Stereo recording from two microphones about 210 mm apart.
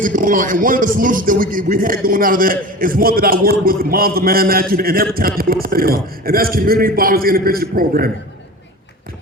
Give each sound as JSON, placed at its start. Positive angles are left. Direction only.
{"t": 0.0, "sound": "a man's voice", "side_deg": -40}